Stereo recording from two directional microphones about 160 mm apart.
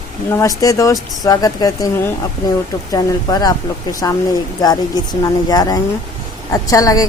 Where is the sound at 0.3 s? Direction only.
20° left (ahead or behind).